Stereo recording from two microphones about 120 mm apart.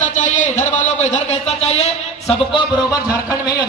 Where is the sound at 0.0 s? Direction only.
90° left; by 1.9 s 65° left (ahead or behind).